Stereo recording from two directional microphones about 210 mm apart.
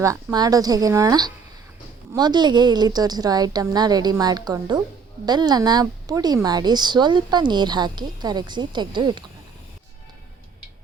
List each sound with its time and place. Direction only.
0.0 s speech: 15° right (ahead or behind)